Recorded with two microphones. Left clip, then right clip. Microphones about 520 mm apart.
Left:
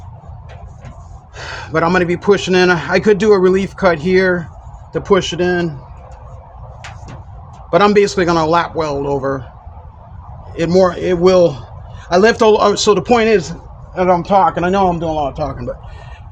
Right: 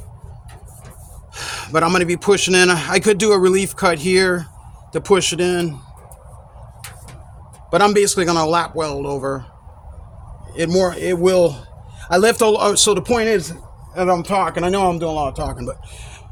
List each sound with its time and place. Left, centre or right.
1.4 s a man's voice: right
7.7 s a man's voice: right
10.5 s a man's voice: right
14.3 s speech: right
14.6 s a man's voice: right